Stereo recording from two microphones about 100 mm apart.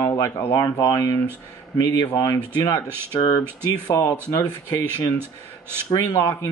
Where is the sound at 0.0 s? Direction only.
30° left (ahead or behind).